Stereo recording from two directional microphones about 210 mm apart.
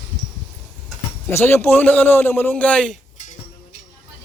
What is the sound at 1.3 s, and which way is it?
A man's voice, 10° left (ahead or behind).